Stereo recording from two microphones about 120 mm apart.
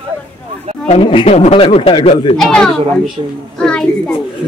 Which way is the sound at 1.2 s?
60° left (ahead or behind).